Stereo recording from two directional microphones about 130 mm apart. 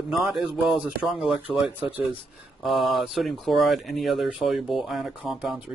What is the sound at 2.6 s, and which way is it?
Speech, centre (ahead or behind).